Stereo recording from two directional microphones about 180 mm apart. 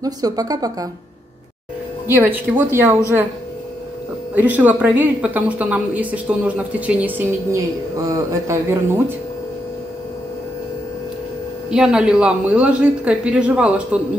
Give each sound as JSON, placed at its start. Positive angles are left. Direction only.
{"t": 0.0, "sound": "speech", "side_deg": -20}
{"t": 2.0, "sound": "a woman's voice", "side_deg": -10}
{"t": 4.4, "sound": "a woman's voice", "side_deg": -10}
{"t": 11.7, "sound": "a woman's voice", "side_deg": -5}